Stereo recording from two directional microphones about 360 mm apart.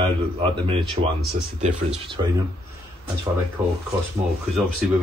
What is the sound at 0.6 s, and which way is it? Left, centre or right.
Speech, centre.